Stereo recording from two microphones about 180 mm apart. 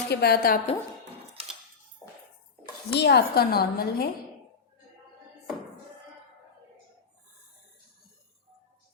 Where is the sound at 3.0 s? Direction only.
65° left (ahead or behind).